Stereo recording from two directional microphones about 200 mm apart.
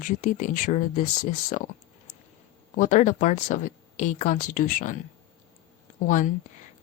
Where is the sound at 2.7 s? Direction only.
40° left (ahead or behind).